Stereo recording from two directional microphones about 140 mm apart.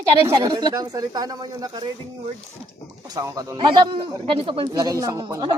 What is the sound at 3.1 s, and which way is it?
A man's voice, 25° right (ahead or behind).